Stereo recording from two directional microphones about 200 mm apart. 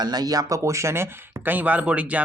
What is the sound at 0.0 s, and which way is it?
Speech, 20° right (ahead or behind).